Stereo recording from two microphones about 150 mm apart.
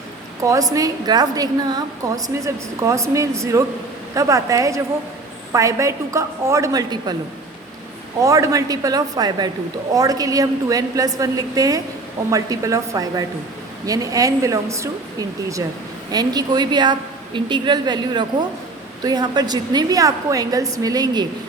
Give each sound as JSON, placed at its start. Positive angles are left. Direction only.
{"t": 0.4, "sound": "a woman's voice", "side_deg": -20}
{"t": 8.2, "sound": "a woman's voice", "side_deg": -20}
{"t": 16.1, "sound": "a woman's voice", "side_deg": -25}